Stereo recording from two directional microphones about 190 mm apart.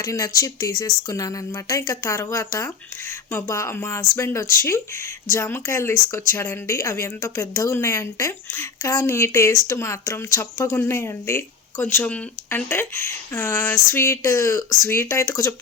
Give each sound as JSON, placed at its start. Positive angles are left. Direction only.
{"t": 0.0, "sound": "speech", "side_deg": 20}